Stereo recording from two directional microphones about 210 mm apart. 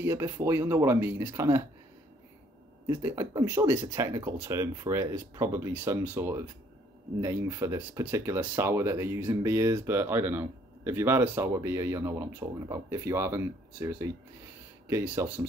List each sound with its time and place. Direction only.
0.0 s speech: 10° right (ahead or behind)
2.9 s speech: 10° right (ahead or behind)